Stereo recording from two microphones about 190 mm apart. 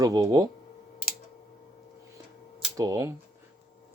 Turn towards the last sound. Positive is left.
turn(degrees=-20)  # may be behind; listen again after turning